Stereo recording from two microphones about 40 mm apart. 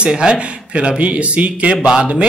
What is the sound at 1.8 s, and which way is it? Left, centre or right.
Speech, right.